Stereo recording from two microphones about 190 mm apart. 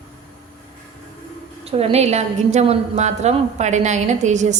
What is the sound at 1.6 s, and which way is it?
A woman's voice, 30° right (ahead or behind).